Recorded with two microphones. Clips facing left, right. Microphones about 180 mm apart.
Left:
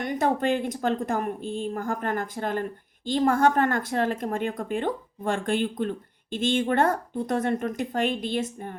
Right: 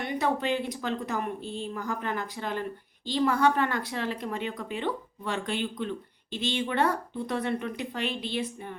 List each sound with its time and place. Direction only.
0.0 s a woman's voice: 45° left (ahead or behind)